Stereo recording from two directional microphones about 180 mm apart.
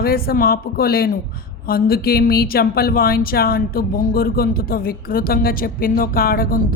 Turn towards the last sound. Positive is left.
turn(degrees=55)  # may be behind; listen again after turning